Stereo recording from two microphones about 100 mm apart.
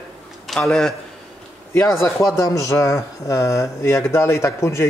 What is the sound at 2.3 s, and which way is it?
Speech, 30° left (ahead or behind).